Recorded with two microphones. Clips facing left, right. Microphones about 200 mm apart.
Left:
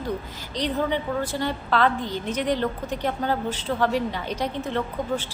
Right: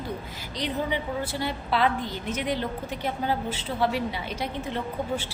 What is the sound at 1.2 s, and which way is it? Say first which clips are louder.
A woman's voice: left 3 dB; 10° right (ahead or behind).